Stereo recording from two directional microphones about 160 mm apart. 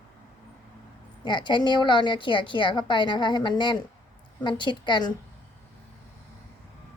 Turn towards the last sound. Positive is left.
turn(degrees=30)  # may be behind; listen again after turning